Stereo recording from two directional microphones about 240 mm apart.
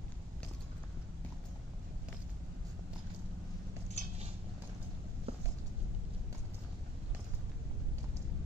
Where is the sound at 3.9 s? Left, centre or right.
Right.